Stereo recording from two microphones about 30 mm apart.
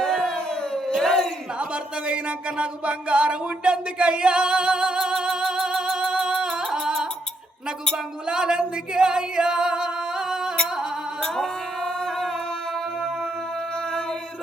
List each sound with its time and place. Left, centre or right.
0.0 s a sound: centre
2.6 s music: right; by 6.1 s centre
6.1 s music: right
8.3 s singing: right